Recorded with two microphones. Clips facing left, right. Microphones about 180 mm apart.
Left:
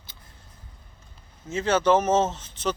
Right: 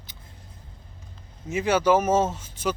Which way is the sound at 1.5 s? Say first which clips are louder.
Even; 10° right (ahead or behind).